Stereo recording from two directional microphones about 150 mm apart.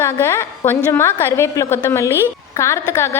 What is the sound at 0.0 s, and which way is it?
A woman's voice, 15° left (ahead or behind).